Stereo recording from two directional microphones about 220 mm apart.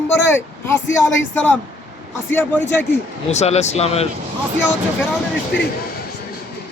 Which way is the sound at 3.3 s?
30° left (ahead or behind).